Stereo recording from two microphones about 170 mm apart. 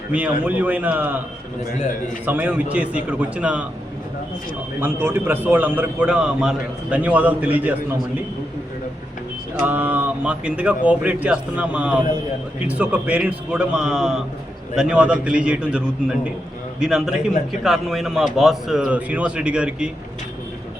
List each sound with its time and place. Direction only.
0.1 s a man's voice: 10° right (ahead or behind)
2.2 s a man's voice: 10° right (ahead or behind)
4.8 s a man's voice: 10° right (ahead or behind)
9.6 s a man's voice: 10° right (ahead or behind)